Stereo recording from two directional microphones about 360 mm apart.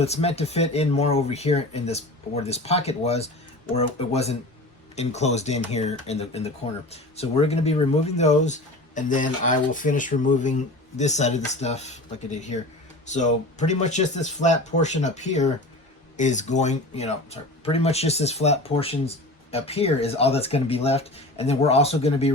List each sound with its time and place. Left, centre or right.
0.0 s speech: centre